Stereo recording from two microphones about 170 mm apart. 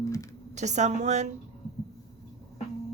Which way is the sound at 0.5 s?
45° right (ahead or behind).